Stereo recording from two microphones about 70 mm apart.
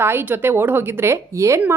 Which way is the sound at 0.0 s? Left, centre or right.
Right.